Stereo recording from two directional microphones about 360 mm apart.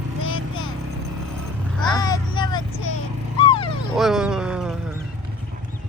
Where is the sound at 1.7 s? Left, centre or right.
Centre.